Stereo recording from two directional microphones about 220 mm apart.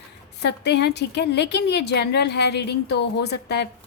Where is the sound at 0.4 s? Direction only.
50° left (ahead or behind).